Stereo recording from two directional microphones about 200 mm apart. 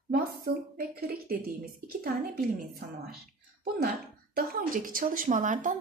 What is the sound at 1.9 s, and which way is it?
Speech, 45° right (ahead or behind).